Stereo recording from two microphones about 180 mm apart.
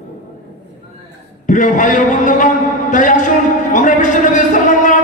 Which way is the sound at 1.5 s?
45° left (ahead or behind).